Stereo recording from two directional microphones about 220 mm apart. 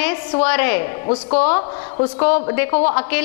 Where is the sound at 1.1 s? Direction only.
30° left (ahead or behind).